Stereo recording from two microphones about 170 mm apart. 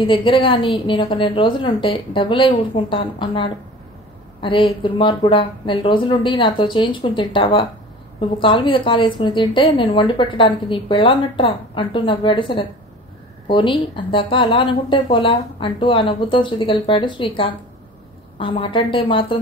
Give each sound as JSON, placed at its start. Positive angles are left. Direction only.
{"t": 0.0, "sound": "a woman's voice", "side_deg": 30}
{"t": 18.4, "sound": "a woman's voice", "side_deg": 30}